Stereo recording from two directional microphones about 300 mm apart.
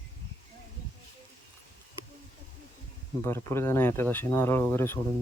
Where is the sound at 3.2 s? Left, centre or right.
Centre.